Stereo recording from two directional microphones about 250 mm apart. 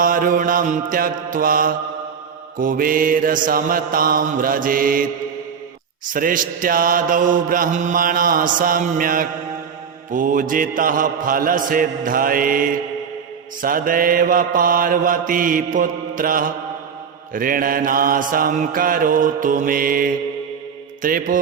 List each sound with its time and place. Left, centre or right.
0.0 s mantra: right
6.1 s mantra: right